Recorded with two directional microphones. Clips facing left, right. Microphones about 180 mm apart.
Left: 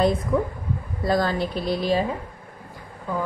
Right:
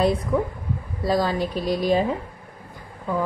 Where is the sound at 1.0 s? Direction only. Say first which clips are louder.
Even; 10° right (ahead or behind).